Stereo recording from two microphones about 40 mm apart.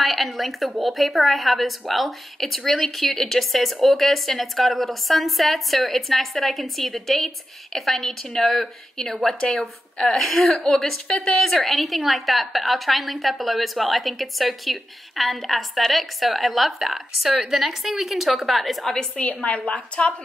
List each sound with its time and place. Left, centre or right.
0.0 s speech: centre
19.2 s a woman's voice: left